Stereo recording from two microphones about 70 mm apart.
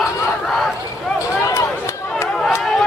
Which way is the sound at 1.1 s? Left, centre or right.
Left.